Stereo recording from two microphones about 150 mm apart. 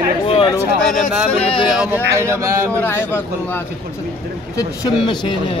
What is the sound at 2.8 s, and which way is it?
Speech, 15° left (ahead or behind).